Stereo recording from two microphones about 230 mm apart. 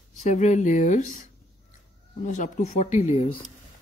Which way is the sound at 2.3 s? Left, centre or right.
Left.